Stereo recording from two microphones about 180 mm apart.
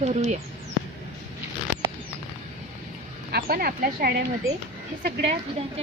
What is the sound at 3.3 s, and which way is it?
Speech, 55° right (ahead or behind).